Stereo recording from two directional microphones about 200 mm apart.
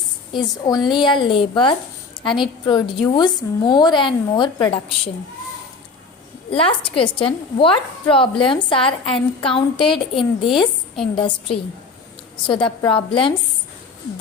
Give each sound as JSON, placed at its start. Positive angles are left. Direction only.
{"t": 0.3, "sound": "a woman's voice", "side_deg": 20}
{"t": 6.5, "sound": "a woman's voice", "side_deg": 25}